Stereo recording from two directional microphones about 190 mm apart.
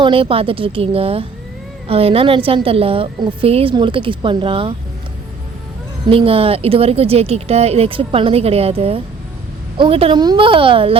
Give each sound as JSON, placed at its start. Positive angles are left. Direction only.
{"t": 0.0, "sound": "a woman's voice", "side_deg": -30}
{"t": 6.1, "sound": "a woman's voice", "side_deg": -30}